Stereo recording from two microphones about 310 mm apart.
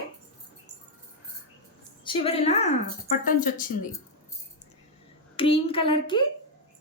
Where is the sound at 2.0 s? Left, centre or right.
Centre.